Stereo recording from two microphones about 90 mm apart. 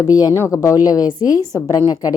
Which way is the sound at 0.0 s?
40° left (ahead or behind).